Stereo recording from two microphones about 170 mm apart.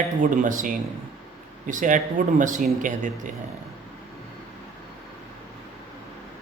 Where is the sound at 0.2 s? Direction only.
50° right (ahead or behind).